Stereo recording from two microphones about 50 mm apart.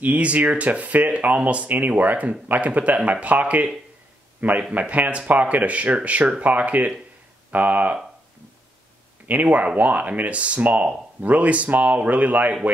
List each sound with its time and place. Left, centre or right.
0.0 s a man's voice: right
9.3 s speech: right